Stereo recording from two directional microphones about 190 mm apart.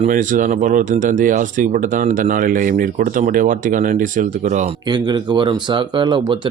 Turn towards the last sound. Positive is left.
turn(degrees=-25)  # may be behind; listen again after turning